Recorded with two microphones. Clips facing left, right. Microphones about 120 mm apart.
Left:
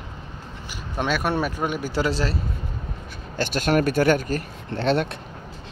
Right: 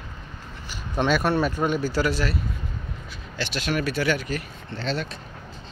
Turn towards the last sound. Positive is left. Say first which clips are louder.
# left 7 dB
turn(degrees=60)  # may be behind; listen again after turning